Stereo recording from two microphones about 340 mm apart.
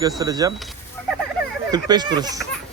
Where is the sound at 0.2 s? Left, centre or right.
Centre.